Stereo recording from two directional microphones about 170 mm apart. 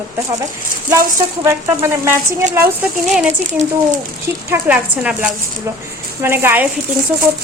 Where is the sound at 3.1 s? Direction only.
5° right (ahead or behind).